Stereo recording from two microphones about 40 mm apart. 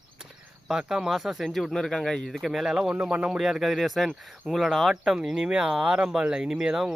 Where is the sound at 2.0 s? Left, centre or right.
Centre.